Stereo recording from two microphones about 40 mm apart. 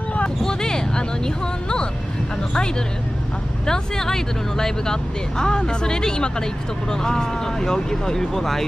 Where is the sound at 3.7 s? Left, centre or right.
Centre.